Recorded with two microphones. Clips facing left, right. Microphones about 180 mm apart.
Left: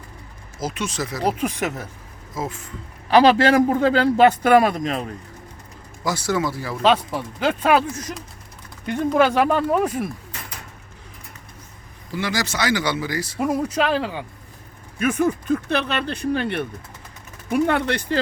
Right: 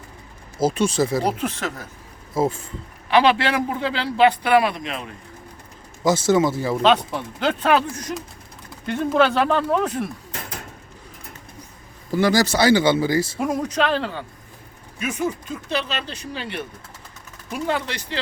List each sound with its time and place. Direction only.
0.6 s speech: 30° right (ahead or behind)
1.2 s speech: 10° left (ahead or behind)
2.3 s speech: 30° right (ahead or behind)
3.1 s a man's voice: 40° left (ahead or behind)
6.1 s speech: 25° right (ahead or behind)
6.8 s speech: 5° left (ahead or behind)
12.1 s speech: 40° right (ahead or behind)
13.4 s speech: 5° left (ahead or behind)
14.9 s speech: 55° left (ahead or behind)